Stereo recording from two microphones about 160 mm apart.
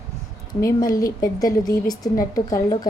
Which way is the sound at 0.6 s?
20° left (ahead or behind).